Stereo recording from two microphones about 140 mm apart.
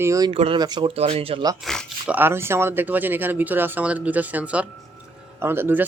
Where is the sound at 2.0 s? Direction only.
15° right (ahead or behind).